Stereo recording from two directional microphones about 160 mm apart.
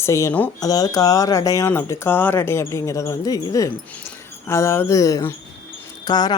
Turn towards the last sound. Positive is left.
turn(degrees=25)  # may be behind; listen again after turning